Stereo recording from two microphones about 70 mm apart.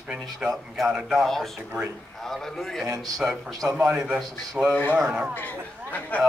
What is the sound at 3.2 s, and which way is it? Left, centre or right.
Speech, centre.